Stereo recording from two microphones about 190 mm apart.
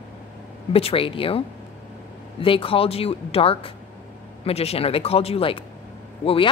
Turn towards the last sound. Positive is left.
turn(degrees=30)  # may be behind; listen again after turning